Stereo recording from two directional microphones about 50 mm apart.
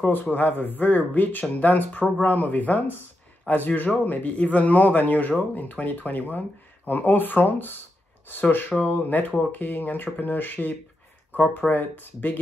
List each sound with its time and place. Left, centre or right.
0.1 s speech: left